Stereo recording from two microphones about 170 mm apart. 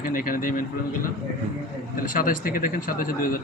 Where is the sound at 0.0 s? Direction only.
55° left (ahead or behind).